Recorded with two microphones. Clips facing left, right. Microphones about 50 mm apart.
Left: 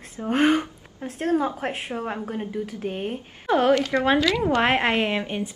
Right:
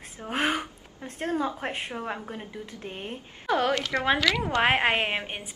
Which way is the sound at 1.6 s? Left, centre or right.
Centre.